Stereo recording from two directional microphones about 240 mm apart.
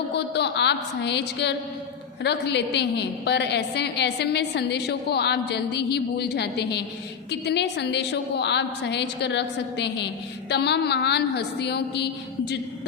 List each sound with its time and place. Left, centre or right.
0.1 s a woman's voice: left